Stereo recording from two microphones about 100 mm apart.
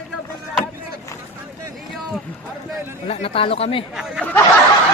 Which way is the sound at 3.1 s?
65° left (ahead or behind).